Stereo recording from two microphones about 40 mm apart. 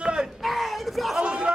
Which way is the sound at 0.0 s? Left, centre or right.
Right.